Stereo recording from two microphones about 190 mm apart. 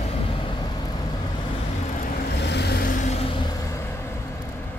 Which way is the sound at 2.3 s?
60° left (ahead or behind).